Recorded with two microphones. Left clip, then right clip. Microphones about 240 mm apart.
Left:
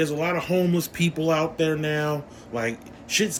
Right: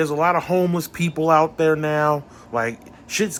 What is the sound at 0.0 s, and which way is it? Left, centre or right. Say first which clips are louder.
Speech: right 6 dB; centre.